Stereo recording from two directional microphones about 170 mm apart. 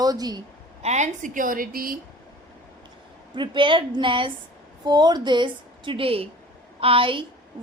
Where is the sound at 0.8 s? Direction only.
45° right (ahead or behind).